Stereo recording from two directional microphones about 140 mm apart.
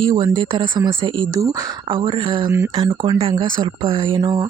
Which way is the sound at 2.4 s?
20° right (ahead or behind).